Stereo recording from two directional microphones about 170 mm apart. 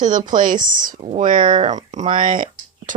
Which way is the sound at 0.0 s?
50° right (ahead or behind).